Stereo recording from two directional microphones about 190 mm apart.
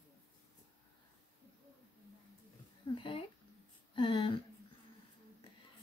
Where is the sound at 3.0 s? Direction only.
25° left (ahead or behind).